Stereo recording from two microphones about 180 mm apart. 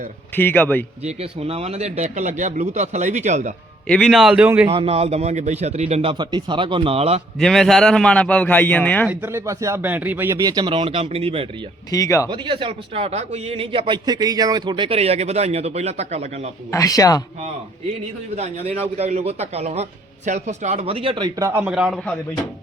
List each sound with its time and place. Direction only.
0.3 s a man's voice: 10° left (ahead or behind)
1.0 s a man's voice: 35° right (ahead or behind)
3.8 s a man's voice: 5° left (ahead or behind)
4.7 s a man's voice: 30° right (ahead or behind)
7.3 s a man's voice: centre (ahead or behind)
9.0 s speech: 15° right (ahead or behind); by 11.4 s 35° right (ahead or behind)
11.9 s a man's voice: 20° left (ahead or behind)
12.3 s a man's voice: 30° right (ahead or behind)
16.7 s speech: 20° left (ahead or behind)
18.3 s a man's voice: 35° right (ahead or behind); by 22.2 s 5° left (ahead or behind)